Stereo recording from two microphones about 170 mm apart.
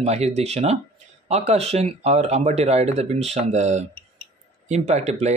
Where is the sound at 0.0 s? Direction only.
40° right (ahead or behind).